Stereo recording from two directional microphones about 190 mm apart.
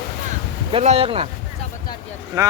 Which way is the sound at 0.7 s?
35° right (ahead or behind).